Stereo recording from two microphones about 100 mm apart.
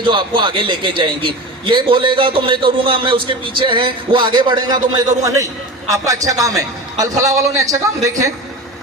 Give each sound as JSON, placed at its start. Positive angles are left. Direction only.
{"t": 0.0, "sound": "a man's voice", "side_deg": -55}